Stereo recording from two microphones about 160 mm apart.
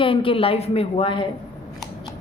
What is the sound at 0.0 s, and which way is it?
A woman's voice, 35° left (ahead or behind).